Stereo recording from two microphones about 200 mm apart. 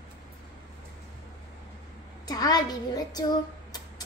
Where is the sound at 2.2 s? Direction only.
20° left (ahead or behind).